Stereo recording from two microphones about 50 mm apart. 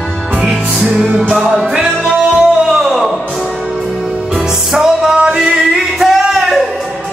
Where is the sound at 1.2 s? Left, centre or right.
Centre.